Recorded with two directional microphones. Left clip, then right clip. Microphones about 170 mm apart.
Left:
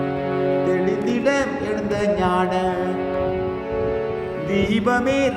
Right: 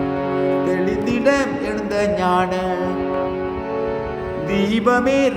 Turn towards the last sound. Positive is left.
turn(degrees=-25)  # may be behind; listen again after turning